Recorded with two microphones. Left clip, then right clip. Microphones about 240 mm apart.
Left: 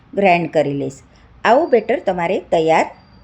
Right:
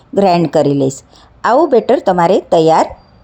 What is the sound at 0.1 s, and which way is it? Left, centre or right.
A woman's voice, right.